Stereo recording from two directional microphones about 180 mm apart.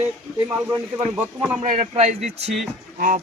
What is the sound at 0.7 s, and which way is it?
Speech, 15° right (ahead or behind).